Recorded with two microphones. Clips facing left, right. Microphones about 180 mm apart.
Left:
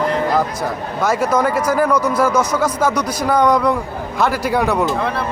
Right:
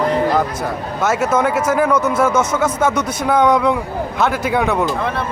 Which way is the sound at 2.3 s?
25° right (ahead or behind).